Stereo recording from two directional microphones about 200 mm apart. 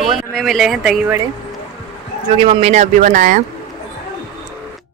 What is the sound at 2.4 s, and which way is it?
Speech, 30° right (ahead or behind).